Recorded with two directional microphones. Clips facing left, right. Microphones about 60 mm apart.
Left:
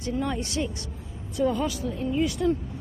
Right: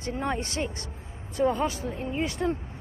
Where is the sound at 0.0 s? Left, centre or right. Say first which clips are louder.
Left 1 dB; right.